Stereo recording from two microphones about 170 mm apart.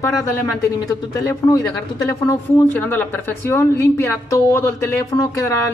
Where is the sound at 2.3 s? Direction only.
15° left (ahead or behind).